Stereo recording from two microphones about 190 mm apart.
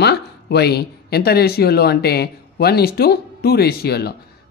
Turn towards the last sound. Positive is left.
turn(degrees=55)  # may be behind; listen again after turning